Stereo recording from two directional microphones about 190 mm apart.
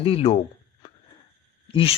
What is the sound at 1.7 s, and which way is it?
Speech, 30° left (ahead or behind).